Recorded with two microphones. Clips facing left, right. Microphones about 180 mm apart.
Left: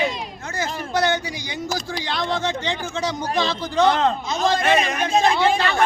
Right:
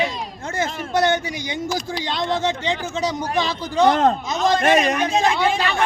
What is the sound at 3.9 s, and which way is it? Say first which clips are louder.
Speech: right 2 dB; 45° right (ahead or behind).